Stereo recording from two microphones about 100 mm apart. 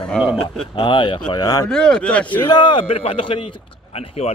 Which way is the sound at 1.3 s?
40° left (ahead or behind).